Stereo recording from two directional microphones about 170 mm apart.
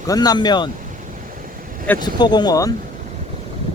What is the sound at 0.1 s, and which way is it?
Speech, 25° left (ahead or behind).